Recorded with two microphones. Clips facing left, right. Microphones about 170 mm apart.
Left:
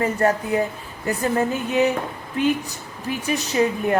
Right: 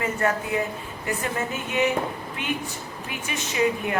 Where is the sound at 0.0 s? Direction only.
35° left (ahead or behind).